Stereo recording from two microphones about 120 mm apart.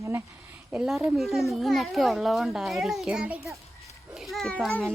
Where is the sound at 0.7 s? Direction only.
5° right (ahead or behind).